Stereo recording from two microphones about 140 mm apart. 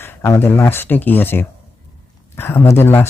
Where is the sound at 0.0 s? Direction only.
15° left (ahead or behind).